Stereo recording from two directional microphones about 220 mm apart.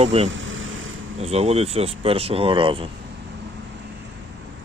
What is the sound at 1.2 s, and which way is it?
Speech, 30° right (ahead or behind).